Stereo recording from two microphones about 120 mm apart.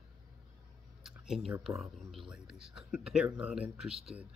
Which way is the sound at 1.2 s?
5° right (ahead or behind).